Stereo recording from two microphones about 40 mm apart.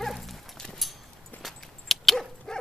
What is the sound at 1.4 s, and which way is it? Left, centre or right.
Dog, centre.